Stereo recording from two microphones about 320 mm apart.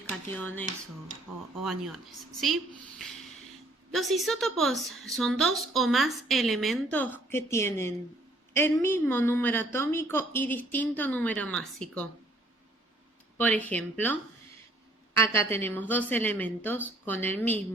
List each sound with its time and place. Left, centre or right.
0.1 s speech: centre
3.0 s snort: centre
3.9 s a woman's voice: centre
13.4 s a woman's voice: centre